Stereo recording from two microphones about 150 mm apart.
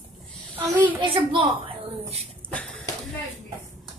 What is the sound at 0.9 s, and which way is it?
Speech, 35° right (ahead or behind).